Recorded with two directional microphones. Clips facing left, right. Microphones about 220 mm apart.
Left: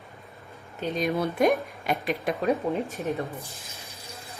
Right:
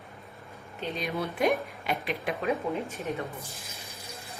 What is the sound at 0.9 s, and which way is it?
A woman's voice, 45° left (ahead or behind).